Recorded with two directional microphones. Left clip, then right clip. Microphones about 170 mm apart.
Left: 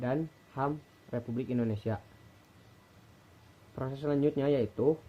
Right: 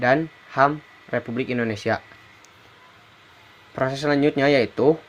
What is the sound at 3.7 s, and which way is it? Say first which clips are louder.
Speech: right 12 dB; 30° right (ahead or behind).